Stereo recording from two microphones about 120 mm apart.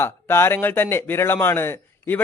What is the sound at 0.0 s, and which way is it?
A man's voice, 20° left (ahead or behind).